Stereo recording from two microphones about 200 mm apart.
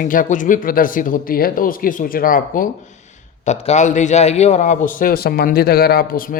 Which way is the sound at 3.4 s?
35° left (ahead or behind).